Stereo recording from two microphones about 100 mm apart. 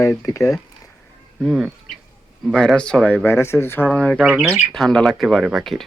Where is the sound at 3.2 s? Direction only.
25° left (ahead or behind).